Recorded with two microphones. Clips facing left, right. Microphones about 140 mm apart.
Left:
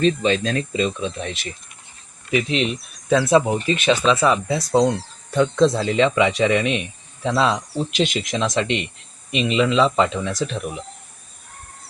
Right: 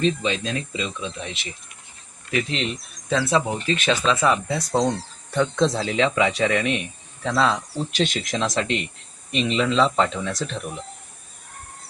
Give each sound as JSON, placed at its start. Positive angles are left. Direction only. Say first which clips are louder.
{"t": 0.0, "sound": "speech", "louder": "left 4 dB", "side_deg": 50}
{"t": 2.3, "sound": "speech", "louder": "left 4 dB", "side_deg": 5}
{"t": 3.8, "sound": "speech", "louder": "left 4 dB", "side_deg": 5}
{"t": 7.3, "sound": "speech", "louder": "left 2 dB", "side_deg": 20}
{"t": 7.9, "sound": "speech", "louder": "left 2 dB", "side_deg": 0}